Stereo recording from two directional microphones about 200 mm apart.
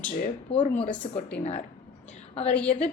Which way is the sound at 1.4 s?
35° left (ahead or behind).